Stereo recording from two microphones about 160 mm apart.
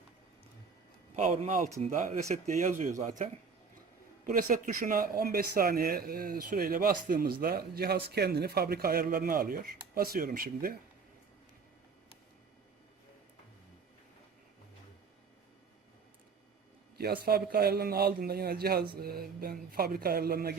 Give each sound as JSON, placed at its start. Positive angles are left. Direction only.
{"t": 1.1, "sound": "speech", "side_deg": -45}
{"t": 4.3, "sound": "speech", "side_deg": -55}
{"t": 17.0, "sound": "speech", "side_deg": -70}